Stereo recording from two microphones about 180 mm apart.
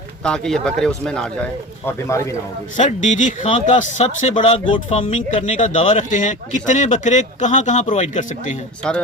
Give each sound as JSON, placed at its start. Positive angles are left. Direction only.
{"t": 0.2, "sound": "speech", "side_deg": 5}
{"t": 2.7, "sound": "speech", "side_deg": 45}
{"t": 8.8, "sound": "speech", "side_deg": 5}